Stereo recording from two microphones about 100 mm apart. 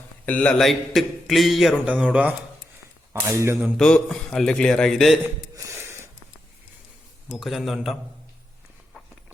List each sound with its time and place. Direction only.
0.3 s a man's voice: 15° left (ahead or behind)
0.6 s speech: centre (ahead or behind)
3.2 s cap gun: 25° right (ahead or behind)
3.8 s speech: 5° left (ahead or behind)
5.5 s a sound: 30° right (ahead or behind)
7.3 s speech: centre (ahead or behind)